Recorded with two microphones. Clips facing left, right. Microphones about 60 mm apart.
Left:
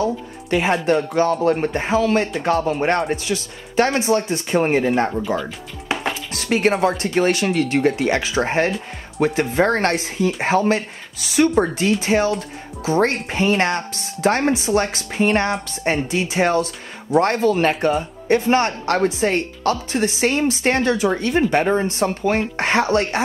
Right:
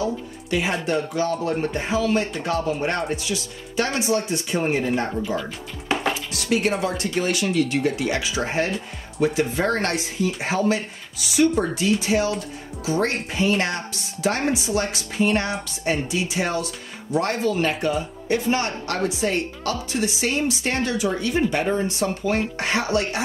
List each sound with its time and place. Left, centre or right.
0.0 s speech: left
3.2 s speech: left
5.9 s chopping: centre
6.7 s speech: left